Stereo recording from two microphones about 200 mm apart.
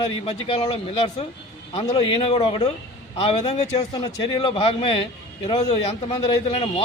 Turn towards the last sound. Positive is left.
turn(degrees=30)  # may be behind; listen again after turning